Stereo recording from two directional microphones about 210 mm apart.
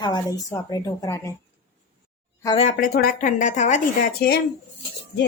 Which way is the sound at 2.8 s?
40° left (ahead or behind).